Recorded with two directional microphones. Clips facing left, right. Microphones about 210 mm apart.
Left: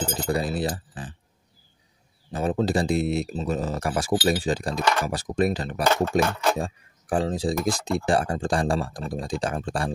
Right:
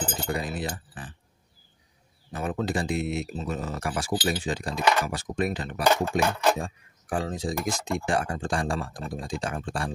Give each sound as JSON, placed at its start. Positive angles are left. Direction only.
{"t": 0.0, "sound": "chink", "side_deg": 30}
{"t": 2.3, "sound": "speech", "side_deg": 30}